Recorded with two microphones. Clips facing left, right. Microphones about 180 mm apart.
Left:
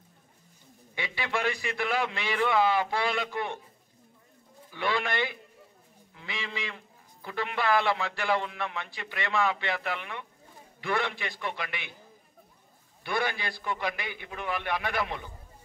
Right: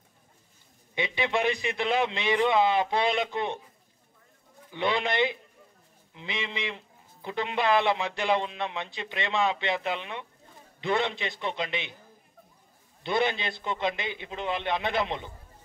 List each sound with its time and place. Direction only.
0.9 s a man's voice: 20° right (ahead or behind)
4.6 s a man's voice: 20° right (ahead or behind)
13.0 s a man's voice: 20° right (ahead or behind)